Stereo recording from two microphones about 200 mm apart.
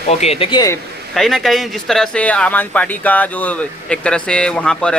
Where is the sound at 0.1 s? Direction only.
30° left (ahead or behind).